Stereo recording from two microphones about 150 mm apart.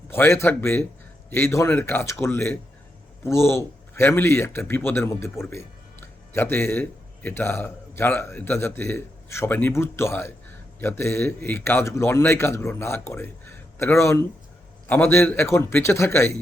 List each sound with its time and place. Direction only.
0.1 s a man's voice: 15° left (ahead or behind)